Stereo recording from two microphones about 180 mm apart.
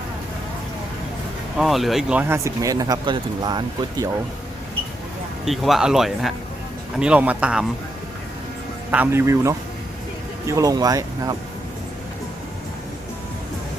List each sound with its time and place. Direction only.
1.5 s speech: centre (ahead or behind); by 4.1 s 20° right (ahead or behind)
5.5 s speech: centre (ahead or behind)
8.9 s speech: 10° right (ahead or behind)